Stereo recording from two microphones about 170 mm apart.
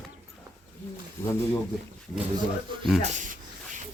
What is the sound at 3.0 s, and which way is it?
Speech, 45° right (ahead or behind).